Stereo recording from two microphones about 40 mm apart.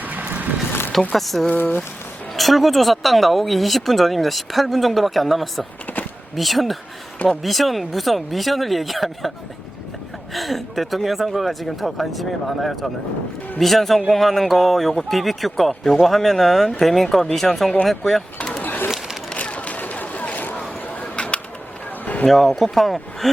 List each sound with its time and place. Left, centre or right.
0.0 s vehicle: right
0.7 s vehicle: left
1.1 s speech: centre
10.3 s speech: centre
18.6 s bird: left
19.4 s a sound: left
22.0 s a sound: left
22.3 s speech: centre